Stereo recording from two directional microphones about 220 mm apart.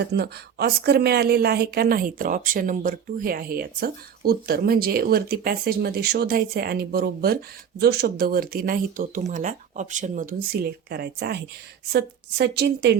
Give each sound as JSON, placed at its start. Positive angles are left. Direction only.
{"t": 0.0, "sound": "speech", "side_deg": -50}